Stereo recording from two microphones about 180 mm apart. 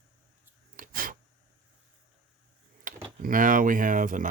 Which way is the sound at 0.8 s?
50° right (ahead or behind).